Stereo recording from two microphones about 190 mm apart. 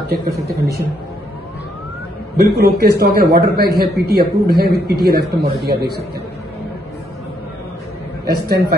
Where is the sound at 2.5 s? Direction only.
60° right (ahead or behind).